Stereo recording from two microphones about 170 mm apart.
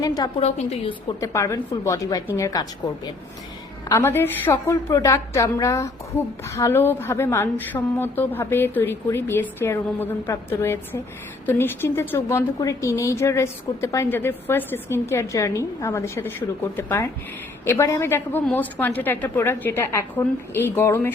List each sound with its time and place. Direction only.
0.3 s a woman's voice: 40° left (ahead or behind)
1.2 s a woman's voice: 15° left (ahead or behind)
3.8 s a woman's voice: 15° left (ahead or behind)